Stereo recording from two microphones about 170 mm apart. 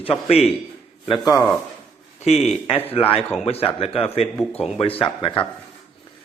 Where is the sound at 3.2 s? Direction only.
5° left (ahead or behind).